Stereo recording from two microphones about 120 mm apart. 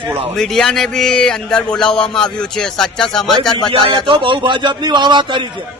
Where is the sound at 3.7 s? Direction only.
45° right (ahead or behind).